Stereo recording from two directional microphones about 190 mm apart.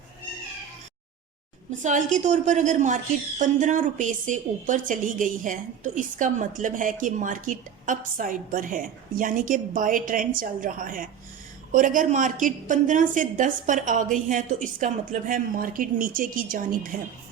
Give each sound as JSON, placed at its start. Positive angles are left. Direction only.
{"t": 1.8, "sound": "a woman's voice", "side_deg": -40}